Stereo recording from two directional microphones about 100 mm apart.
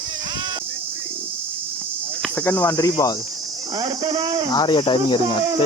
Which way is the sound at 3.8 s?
50° right (ahead or behind).